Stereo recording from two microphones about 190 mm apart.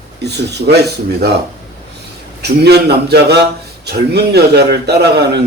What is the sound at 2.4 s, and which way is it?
A man's voice, 60° right (ahead or behind).